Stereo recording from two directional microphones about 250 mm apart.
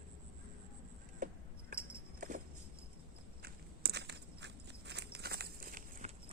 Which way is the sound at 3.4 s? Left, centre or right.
Right.